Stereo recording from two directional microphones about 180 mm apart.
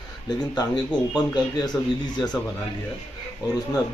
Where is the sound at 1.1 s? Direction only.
20° left (ahead or behind).